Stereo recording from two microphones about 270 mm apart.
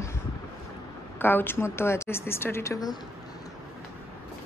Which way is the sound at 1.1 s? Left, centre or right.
Centre.